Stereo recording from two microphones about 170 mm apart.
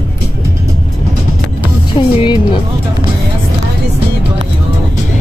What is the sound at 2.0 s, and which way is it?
Speech, 30° left (ahead or behind).